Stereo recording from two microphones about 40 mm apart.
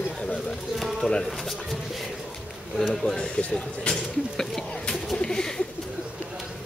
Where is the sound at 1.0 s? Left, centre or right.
Left.